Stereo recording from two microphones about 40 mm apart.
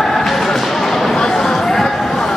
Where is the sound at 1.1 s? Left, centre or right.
Centre.